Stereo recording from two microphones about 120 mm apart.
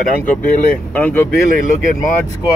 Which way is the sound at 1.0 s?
15° left (ahead or behind).